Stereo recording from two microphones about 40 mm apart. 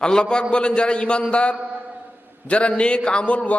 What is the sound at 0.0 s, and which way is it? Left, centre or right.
A man's voice, left.